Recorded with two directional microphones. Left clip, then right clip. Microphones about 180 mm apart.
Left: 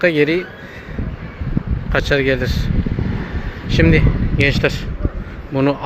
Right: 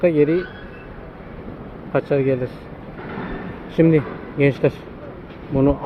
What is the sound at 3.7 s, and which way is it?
Speech, 10° right (ahead or behind).